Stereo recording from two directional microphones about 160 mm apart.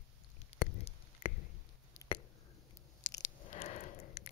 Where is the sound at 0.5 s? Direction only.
40° left (ahead or behind).